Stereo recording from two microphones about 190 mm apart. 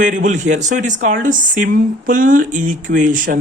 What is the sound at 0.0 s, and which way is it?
Speech, 45° right (ahead or behind).